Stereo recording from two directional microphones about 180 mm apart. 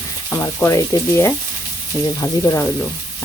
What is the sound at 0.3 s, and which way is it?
Speech, 15° left (ahead or behind).